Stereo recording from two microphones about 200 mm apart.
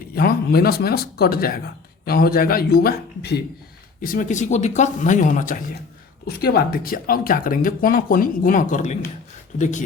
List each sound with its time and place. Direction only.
0.2 s speech: 50° left (ahead or behind)
4.0 s speech: 40° left (ahead or behind)
6.2 s speech: 50° left (ahead or behind)